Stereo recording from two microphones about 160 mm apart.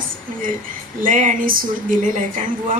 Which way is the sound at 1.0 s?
55° right (ahead or behind).